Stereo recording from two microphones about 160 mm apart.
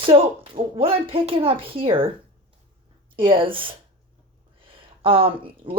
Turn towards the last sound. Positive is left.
turn(degrees=-35)  # may be behind; listen again after turning